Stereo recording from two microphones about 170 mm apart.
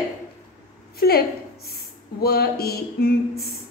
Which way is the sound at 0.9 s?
65° left (ahead or behind).